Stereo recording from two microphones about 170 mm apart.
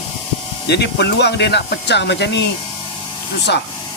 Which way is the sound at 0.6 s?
80° left.